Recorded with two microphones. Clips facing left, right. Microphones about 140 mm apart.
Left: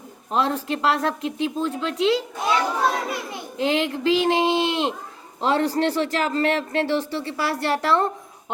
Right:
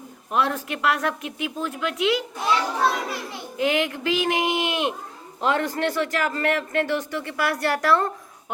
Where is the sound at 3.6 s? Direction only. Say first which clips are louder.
Left 1 dB; 30° left (ahead or behind).